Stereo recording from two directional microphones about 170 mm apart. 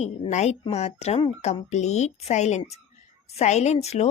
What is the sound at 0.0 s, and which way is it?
A woman's voice, 45° left (ahead or behind).